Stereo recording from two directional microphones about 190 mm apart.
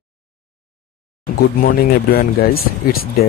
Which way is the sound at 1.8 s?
50° left (ahead or behind).